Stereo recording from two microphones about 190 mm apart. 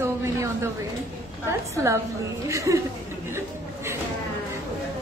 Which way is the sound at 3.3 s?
15° right (ahead or behind).